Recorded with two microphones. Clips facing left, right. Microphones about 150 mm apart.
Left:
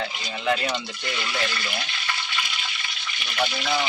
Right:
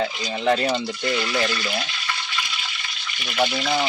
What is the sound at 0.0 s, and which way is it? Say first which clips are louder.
Speech: right 5 dB; 35° right (ahead or behind).